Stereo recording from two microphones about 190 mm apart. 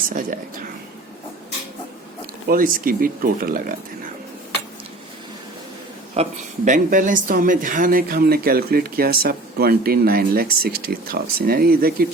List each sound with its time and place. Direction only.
0.1 s speech: 45° right (ahead or behind)
2.5 s speech: 45° right (ahead or behind)
6.2 s speech: 35° right (ahead or behind)
6.7 s speech: 45° right (ahead or behind)